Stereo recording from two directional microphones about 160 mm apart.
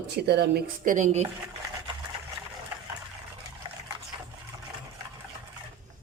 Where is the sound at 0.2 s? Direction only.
90° right.